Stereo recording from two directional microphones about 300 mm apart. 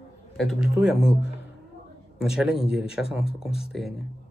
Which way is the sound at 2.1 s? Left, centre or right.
Centre.